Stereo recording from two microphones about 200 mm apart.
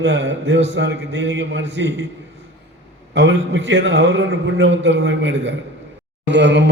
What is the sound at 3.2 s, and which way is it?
Mantra, 65° right (ahead or behind).